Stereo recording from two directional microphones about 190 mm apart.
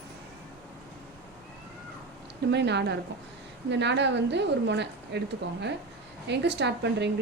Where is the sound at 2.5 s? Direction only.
65° right (ahead or behind).